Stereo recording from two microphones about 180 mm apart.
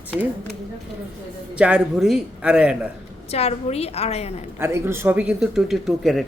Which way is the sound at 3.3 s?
35° left (ahead or behind).